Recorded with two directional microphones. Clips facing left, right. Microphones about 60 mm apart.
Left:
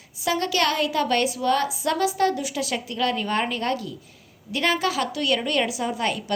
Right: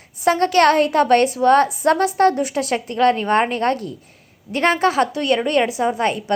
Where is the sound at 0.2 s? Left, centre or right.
Right.